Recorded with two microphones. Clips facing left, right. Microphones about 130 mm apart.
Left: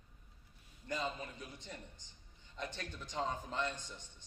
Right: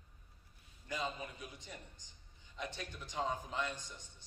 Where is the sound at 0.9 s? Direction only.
10° right (ahead or behind).